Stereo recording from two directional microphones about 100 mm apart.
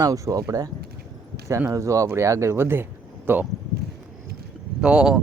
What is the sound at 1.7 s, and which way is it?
Speech, 30° right (ahead or behind).